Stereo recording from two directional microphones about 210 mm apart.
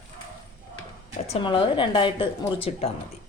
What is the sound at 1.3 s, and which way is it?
A woman's voice, 25° left (ahead or behind).